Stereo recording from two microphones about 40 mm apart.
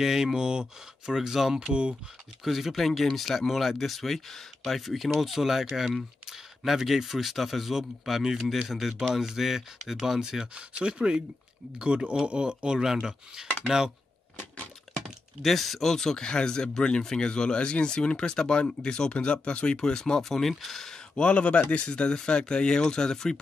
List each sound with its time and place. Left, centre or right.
0.0 s speech: centre
1.6 s speech: right
2.4 s speech: centre
10.4 s speech: right
15.4 s speech: centre
19.1 s speech: left; by 20.9 s centre
21.1 s speech: left